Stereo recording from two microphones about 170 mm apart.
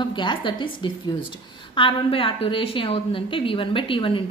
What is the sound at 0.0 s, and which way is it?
Speech, 30° left (ahead or behind).